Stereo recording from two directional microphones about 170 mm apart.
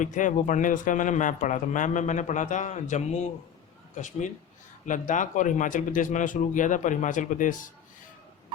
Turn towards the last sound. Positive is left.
turn(degrees=50)  # may be behind; listen again after turning